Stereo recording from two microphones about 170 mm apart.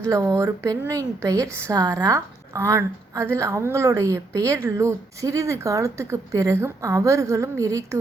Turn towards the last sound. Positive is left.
turn(degrees=-20)  # may be behind; listen again after turning